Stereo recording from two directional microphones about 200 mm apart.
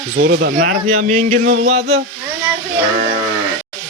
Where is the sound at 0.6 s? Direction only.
40° right (ahead or behind).